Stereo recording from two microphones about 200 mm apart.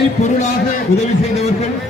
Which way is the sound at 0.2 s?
35° left (ahead or behind).